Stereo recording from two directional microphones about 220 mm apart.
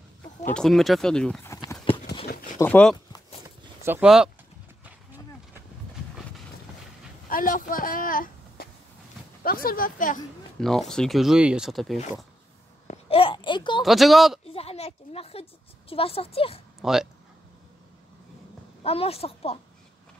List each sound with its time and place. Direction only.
0.5 s speech: centre (ahead or behind)
1.5 s clip-clop: 15° left (ahead or behind)
2.6 s speech: 5° left (ahead or behind)
3.8 s speech: 5° right (ahead or behind)
7.2 s speech: 40° left (ahead or behind)
10.6 s speech: centre (ahead or behind)
12.8 s babbling: 30° left (ahead or behind)
13.8 s speech: centre (ahead or behind)
14.5 s a sound: 25° left (ahead or behind)
15.9 s a woman's voice: 25° left (ahead or behind)
16.8 s speech: centre (ahead or behind)
18.8 s a woman's voice: 25° left (ahead or behind)